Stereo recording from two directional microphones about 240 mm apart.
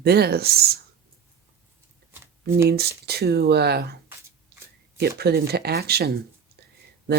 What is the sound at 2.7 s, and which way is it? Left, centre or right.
Speech, right.